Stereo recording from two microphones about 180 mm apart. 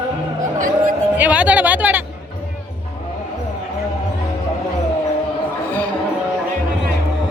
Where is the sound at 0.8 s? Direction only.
10° right (ahead or behind).